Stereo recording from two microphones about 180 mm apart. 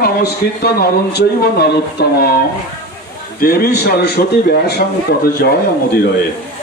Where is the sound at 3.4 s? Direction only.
55° left (ahead or behind).